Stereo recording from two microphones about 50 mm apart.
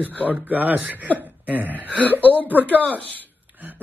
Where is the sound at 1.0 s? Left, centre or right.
Right.